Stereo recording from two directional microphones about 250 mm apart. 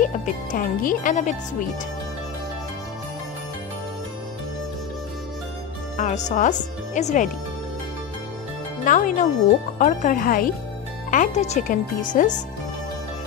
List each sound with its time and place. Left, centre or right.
0.0 s speech: left
5.9 s speech: left
8.8 s speech: left